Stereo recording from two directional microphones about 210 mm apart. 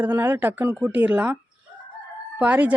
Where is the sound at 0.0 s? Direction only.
10° right (ahead or behind).